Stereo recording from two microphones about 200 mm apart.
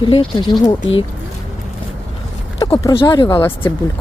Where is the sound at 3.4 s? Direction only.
10° left (ahead or behind).